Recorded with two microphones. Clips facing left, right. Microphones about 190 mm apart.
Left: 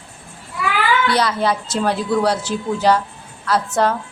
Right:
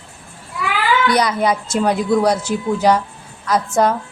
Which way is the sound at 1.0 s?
15° right (ahead or behind).